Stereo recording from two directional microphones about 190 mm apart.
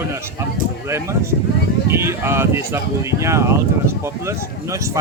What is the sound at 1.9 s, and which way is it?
Speech, 15° right (ahead or behind).